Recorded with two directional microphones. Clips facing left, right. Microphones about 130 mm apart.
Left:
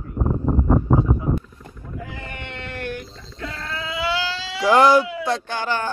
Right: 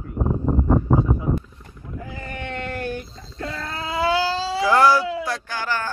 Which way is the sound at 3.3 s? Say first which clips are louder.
Right 1 dB; 45° right (ahead or behind).